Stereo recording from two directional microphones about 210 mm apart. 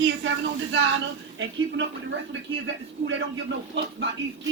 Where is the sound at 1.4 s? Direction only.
60° right (ahead or behind).